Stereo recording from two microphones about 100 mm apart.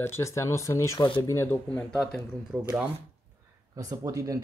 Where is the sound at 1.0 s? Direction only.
55° left (ahead or behind).